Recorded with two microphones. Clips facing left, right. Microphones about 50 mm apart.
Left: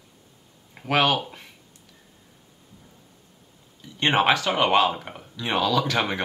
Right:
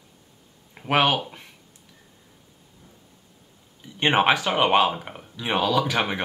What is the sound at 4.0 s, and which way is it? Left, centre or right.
Speech, centre.